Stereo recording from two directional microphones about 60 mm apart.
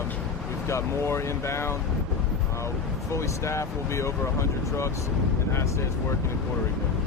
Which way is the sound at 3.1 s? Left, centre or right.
Left.